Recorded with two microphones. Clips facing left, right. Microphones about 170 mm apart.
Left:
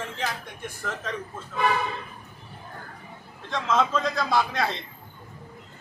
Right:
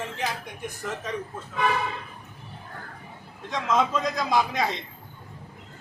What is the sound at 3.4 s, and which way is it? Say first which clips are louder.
A man's voice: even; 15° right (ahead or behind).